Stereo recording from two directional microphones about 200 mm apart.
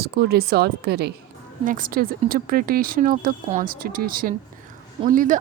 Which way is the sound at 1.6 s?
45° right (ahead or behind).